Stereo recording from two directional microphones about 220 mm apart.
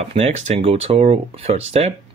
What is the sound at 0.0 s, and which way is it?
Speech, 30° right (ahead or behind).